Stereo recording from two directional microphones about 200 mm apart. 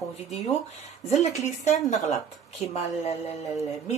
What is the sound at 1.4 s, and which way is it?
Speech, 35° left (ahead or behind).